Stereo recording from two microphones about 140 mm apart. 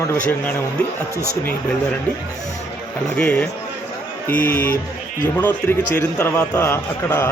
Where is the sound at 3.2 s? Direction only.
10° left (ahead or behind).